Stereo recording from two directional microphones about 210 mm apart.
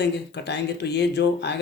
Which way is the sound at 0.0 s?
55° left (ahead or behind).